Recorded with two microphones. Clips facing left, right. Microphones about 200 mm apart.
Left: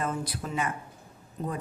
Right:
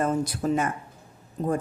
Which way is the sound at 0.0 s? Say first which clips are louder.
Right 7 dB; 45° right (ahead or behind).